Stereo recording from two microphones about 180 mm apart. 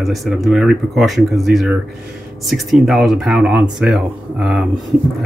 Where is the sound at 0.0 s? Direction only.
Centre (ahead or behind).